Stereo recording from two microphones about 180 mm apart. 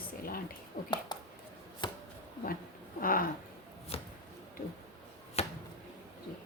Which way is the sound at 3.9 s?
30° left (ahead or behind).